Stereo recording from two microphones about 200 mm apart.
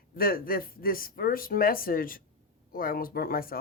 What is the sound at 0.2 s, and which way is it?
A woman's voice, 45° left (ahead or behind).